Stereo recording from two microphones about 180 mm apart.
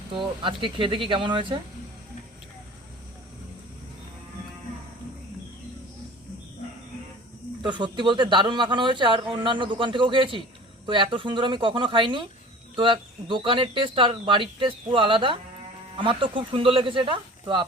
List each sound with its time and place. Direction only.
0.1 s speech: 30° right (ahead or behind)
7.6 s speech: 25° right (ahead or behind)